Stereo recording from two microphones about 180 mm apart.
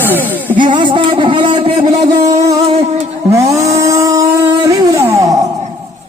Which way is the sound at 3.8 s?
20° right (ahead or behind).